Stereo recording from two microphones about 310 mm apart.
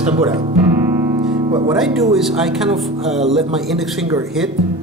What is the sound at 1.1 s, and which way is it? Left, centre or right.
Music, centre.